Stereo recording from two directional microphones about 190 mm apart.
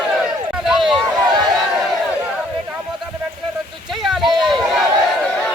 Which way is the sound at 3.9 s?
Centre (ahead or behind).